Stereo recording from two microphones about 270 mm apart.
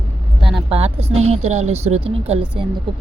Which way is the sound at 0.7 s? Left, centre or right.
Right.